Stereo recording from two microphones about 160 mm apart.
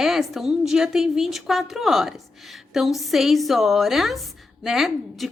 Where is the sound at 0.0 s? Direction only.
Centre (ahead or behind).